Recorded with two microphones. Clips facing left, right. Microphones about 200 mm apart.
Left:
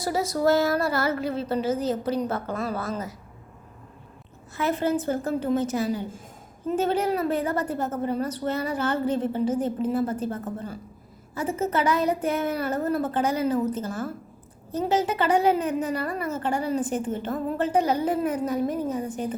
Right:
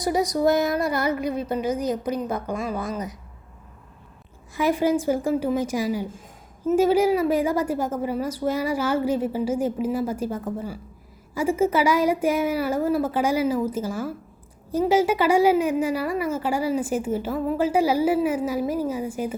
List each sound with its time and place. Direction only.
0.0 s a woman's voice: 15° right (ahead or behind)
4.5 s a woman's voice: 10° right (ahead or behind)